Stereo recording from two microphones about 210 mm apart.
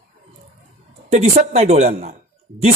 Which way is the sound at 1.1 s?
30° right (ahead or behind).